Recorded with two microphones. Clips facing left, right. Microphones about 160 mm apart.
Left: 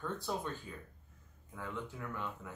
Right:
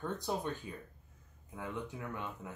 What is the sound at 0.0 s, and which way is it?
Speech, 20° right (ahead or behind).